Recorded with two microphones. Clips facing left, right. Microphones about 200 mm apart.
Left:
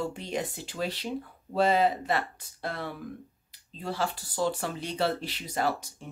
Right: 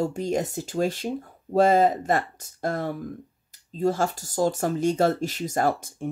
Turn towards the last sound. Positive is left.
turn(degrees=-50)  # may be behind; listen again after turning